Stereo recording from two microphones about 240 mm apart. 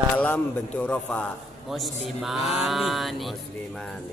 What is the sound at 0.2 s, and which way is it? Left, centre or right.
Speech, centre.